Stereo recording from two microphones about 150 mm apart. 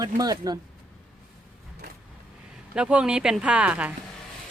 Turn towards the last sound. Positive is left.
turn(degrees=-10)  # may be behind; listen again after turning